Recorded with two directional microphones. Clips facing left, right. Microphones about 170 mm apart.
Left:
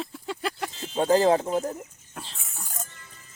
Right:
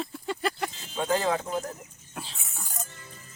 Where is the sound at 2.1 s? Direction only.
Centre (ahead or behind).